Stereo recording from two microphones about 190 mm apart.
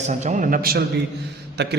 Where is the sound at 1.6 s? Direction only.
60° right (ahead or behind).